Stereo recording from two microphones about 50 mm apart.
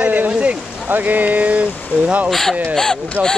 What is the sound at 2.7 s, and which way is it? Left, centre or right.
Speech, centre.